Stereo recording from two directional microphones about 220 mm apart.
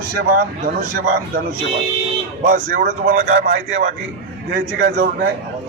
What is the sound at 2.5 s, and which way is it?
A man's voice, 40° right (ahead or behind).